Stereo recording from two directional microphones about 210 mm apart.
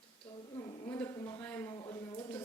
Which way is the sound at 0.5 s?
20° left (ahead or behind).